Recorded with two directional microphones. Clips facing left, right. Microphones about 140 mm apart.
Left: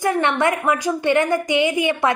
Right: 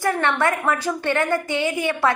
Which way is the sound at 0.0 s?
20° left (ahead or behind).